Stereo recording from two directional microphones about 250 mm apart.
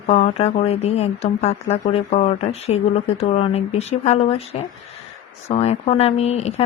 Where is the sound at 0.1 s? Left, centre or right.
Left.